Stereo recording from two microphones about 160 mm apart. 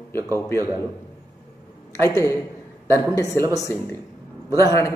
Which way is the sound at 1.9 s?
20° left (ahead or behind).